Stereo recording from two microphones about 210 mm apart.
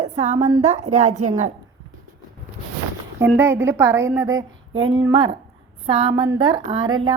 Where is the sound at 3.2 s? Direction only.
10° right (ahead or behind).